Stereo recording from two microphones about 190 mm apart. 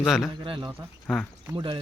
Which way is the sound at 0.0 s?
Centre (ahead or behind).